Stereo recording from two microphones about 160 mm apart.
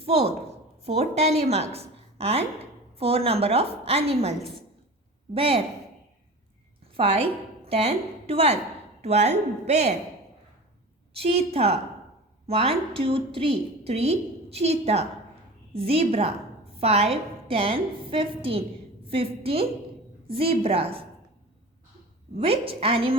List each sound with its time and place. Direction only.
0.0 s a woman's voice: 40° right (ahead or behind)
6.9 s a woman's voice: 40° right (ahead or behind)
11.1 s a woman's voice: 40° right (ahead or behind)
22.4 s a woman's voice: 35° right (ahead or behind)